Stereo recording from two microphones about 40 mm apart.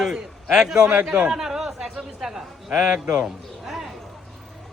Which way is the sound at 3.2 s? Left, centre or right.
Centre.